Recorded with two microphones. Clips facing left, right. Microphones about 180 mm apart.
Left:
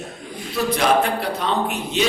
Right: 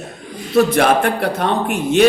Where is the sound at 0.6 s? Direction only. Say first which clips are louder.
Right 5 dB; 50° right (ahead or behind).